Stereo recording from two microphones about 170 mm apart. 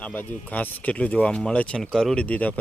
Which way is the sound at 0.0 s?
10° left (ahead or behind).